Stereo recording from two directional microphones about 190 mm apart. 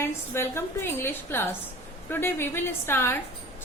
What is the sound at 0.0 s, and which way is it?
A woman's voice, 10° left (ahead or behind).